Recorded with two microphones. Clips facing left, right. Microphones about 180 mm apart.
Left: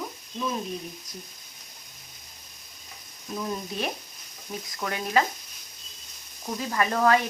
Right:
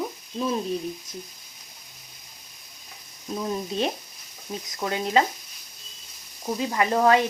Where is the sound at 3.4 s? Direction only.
25° right (ahead or behind).